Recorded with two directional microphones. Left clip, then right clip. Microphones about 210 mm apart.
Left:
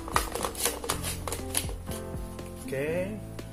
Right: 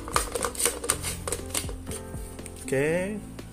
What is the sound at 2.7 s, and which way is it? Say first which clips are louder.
Speech: right 5 dB; 55° right (ahead or behind).